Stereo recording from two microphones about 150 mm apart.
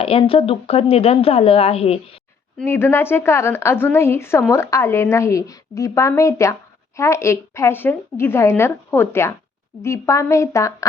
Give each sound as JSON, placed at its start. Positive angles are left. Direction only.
{"t": 0.0, "sound": "speech", "side_deg": 40}
{"t": 2.6, "sound": "a woman's voice", "side_deg": 15}